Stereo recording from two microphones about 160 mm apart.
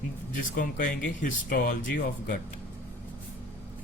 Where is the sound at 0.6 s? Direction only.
55° left (ahead or behind).